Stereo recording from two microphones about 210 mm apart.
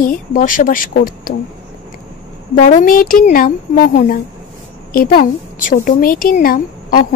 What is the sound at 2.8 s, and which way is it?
A woman's voice, 40° left (ahead or behind).